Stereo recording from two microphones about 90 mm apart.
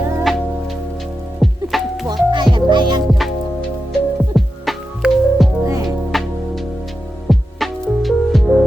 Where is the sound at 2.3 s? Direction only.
60° right (ahead or behind).